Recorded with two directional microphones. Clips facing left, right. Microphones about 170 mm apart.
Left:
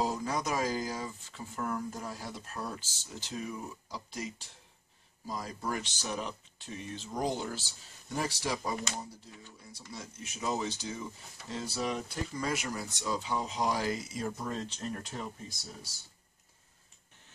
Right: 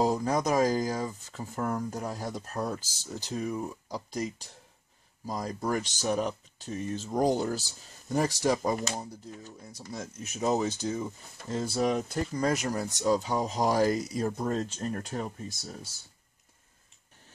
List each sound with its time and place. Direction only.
0.0 s speech: 40° right (ahead or behind)